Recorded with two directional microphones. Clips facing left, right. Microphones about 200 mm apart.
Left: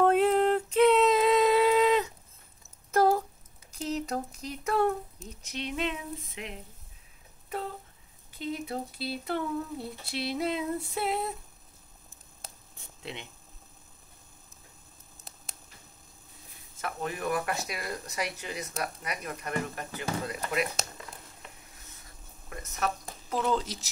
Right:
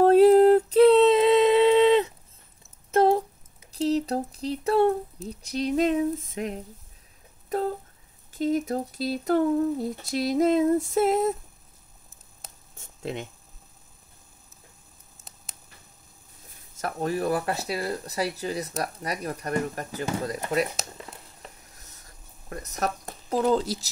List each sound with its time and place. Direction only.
0.0 s a sound: 35° right (ahead or behind)
3.7 s speech: 30° right (ahead or behind)
8.3 s speech: 45° right (ahead or behind)
12.7 s a sound: 45° right (ahead or behind)
16.7 s speech: 40° right (ahead or behind)
20.8 s speech: 5° right (ahead or behind)
22.5 s speech: 40° right (ahead or behind)